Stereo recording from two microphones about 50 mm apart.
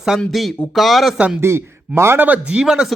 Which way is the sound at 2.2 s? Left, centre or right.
Right.